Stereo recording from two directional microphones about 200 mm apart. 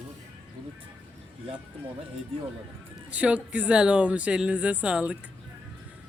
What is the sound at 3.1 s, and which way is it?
Speech, 5° right (ahead or behind).